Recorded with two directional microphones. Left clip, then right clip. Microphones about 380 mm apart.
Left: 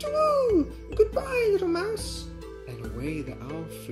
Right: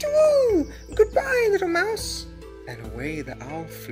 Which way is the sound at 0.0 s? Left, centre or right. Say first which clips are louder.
Right 6 dB; right.